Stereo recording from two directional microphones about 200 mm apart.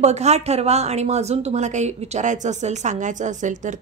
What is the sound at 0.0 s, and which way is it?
A woman's voice, 35° right (ahead or behind).